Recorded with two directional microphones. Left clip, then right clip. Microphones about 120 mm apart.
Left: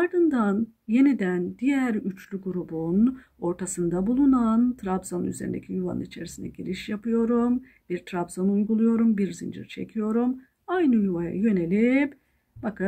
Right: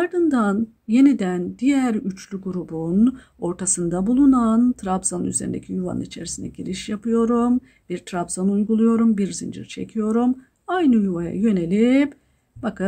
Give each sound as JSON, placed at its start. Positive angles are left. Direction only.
{"t": 0.0, "sound": "speech", "side_deg": -40}